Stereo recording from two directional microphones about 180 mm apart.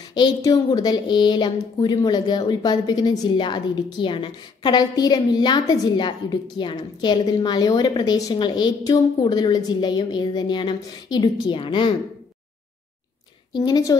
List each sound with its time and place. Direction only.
0.1 s a woman's voice: 20° left (ahead or behind)
13.5 s a woman's voice: 20° left (ahead or behind)